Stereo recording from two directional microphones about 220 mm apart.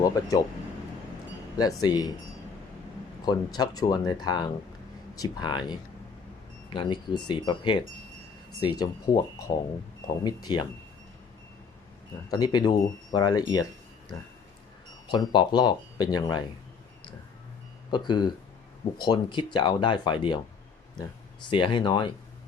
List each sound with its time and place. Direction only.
0.0 s speech: 15° left (ahead or behind)
1.5 s speech: 20° left (ahead or behind)
3.3 s speech: 20° left (ahead or behind)
6.7 s speech: 20° left (ahead or behind)
12.3 s speech: 20° left (ahead or behind)
15.1 s speech: 20° left (ahead or behind)
17.9 s speech: 20° left (ahead or behind)
21.5 s speech: 20° left (ahead or behind)